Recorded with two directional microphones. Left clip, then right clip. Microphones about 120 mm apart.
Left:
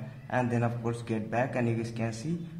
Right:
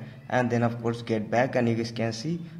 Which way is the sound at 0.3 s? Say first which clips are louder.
Right 5 dB; 35° right (ahead or behind).